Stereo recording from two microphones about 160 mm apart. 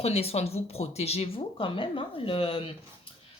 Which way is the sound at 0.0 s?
40° left (ahead or behind).